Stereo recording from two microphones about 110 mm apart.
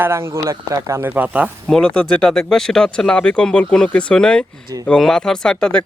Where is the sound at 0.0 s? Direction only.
25° right (ahead or behind).